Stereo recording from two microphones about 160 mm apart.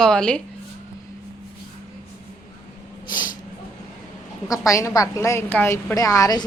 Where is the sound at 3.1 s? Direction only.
25° left (ahead or behind).